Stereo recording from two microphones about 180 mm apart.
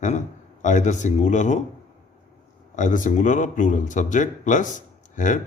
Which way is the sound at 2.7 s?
45° left (ahead or behind).